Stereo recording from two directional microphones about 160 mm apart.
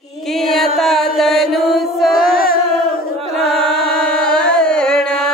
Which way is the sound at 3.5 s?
5° left (ahead or behind).